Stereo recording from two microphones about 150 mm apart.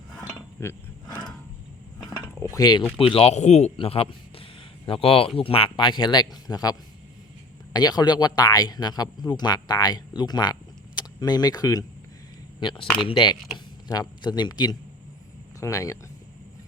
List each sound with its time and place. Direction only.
0.6 s roaring cats: 15° left (ahead or behind)
2.4 s mechanisms: 20° left (ahead or behind)
3.0 s speech: 40° left (ahead or behind); by 16.0 s 20° left (ahead or behind)